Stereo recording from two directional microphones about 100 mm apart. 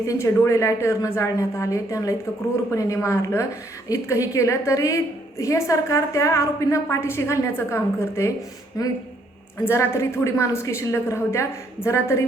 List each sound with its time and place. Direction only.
0.0 s a woman's voice: 30° left (ahead or behind)
8.8 s a woman's voice: 40° left (ahead or behind)
9.6 s a woman's voice: 25° left (ahead or behind)